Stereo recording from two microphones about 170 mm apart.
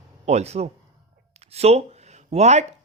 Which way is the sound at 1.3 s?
40° right (ahead or behind).